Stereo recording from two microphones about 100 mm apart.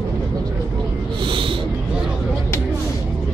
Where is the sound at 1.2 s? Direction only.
60° right (ahead or behind).